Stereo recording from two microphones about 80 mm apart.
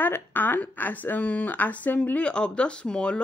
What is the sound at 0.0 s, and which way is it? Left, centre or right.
A woman's voice, left.